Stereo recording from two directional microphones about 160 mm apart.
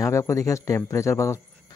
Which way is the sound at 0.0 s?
20° left (ahead or behind).